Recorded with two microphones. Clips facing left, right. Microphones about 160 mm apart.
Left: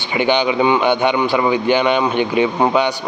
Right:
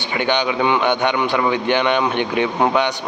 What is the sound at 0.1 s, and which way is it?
A man's voice, 10° left (ahead or behind).